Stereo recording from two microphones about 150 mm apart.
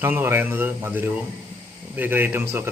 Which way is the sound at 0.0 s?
15° right (ahead or behind).